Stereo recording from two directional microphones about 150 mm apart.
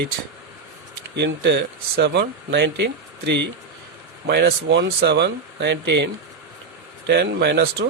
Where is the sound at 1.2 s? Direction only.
90° right.